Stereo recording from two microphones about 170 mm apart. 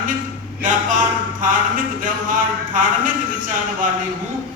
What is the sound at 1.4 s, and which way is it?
Speech, 55° right (ahead or behind).